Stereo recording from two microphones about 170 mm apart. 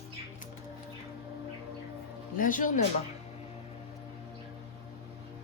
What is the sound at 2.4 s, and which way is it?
Speech, 50° left (ahead or behind).